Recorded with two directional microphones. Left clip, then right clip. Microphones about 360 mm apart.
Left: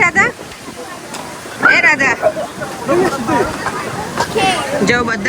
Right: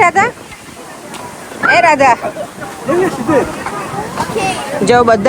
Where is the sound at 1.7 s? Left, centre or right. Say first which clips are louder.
Right 5 dB; centre.